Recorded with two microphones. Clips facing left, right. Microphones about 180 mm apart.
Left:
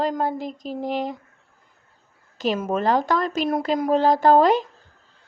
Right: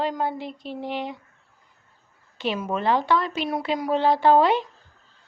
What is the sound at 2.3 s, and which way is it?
Speech, 40° left (ahead or behind).